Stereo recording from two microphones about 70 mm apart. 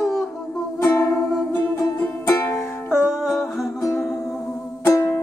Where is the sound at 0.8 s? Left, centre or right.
Left.